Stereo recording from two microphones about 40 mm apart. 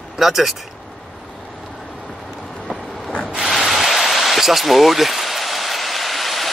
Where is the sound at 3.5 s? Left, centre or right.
Centre.